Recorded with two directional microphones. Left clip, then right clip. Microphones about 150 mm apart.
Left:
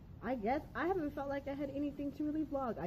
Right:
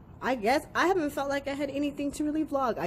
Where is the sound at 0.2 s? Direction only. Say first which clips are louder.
Right 10 dB; 25° right (ahead or behind).